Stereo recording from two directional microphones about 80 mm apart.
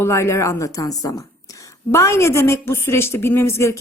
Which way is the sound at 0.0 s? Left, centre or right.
Left.